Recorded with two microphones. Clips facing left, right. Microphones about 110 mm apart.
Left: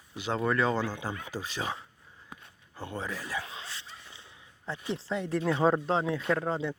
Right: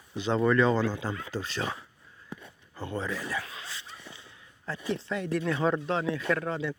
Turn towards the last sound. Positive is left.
turn(degrees=30)  # may be behind; listen again after turning